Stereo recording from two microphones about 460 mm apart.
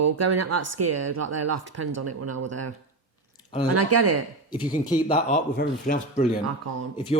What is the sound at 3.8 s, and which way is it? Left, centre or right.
Speech, right.